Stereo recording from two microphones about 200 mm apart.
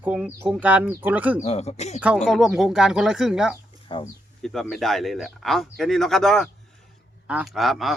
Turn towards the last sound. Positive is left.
turn(degrees=0)  # may be behind; listen again after turning